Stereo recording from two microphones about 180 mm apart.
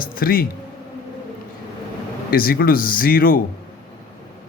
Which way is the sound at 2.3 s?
55° left (ahead or behind).